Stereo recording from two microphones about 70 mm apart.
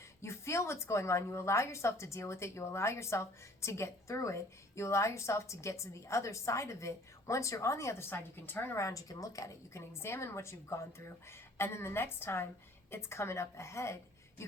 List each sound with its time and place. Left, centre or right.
0.2 s a woman's voice: left